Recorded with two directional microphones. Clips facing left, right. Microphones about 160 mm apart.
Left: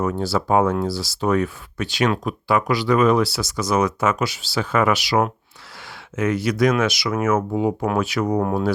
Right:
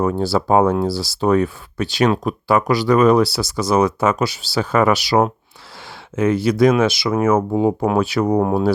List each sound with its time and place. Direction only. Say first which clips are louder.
0.0 s speech: right 4 dB; 30° right (ahead or behind)